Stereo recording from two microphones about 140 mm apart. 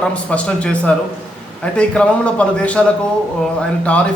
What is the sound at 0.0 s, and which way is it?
A man's voice, 10° left (ahead or behind).